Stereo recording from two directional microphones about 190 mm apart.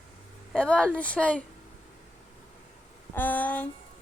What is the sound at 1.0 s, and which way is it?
Speech, 5° left (ahead or behind).